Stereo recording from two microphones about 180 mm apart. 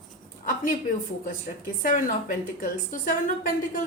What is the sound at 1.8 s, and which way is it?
A woman's voice, 50° left (ahead or behind).